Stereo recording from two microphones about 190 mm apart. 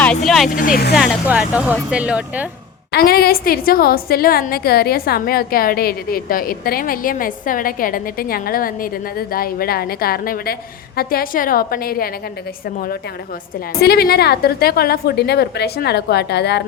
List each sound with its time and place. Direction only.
0.3 s speech: centre (ahead or behind)
0.5 s a woman's voice: 45° left (ahead or behind)
0.9 s speech: centre (ahead or behind)
2.9 s a woman's voice: 55° left (ahead or behind)
13.8 s a woman's voice: 55° left (ahead or behind)